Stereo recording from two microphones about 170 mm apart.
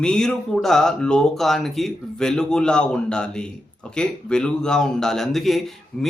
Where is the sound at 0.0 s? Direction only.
5° left (ahead or behind).